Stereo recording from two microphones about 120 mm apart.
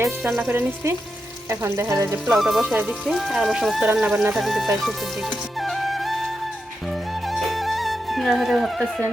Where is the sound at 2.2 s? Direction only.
Centre (ahead or behind).